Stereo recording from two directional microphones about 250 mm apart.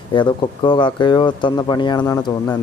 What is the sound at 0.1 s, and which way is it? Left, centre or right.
Speech, centre.